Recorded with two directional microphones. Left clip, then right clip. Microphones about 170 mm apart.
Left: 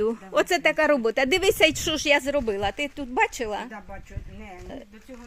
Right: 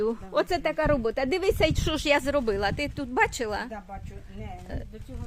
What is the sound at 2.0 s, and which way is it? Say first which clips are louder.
Speech: left 1 dB; centre (ahead or behind).